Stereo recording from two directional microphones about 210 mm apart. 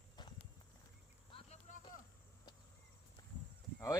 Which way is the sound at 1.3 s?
30° left (ahead or behind).